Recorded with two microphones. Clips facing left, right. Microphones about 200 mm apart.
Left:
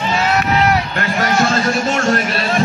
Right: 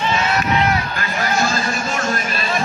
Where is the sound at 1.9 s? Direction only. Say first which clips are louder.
Left 6 dB; 70° left (ahead or behind).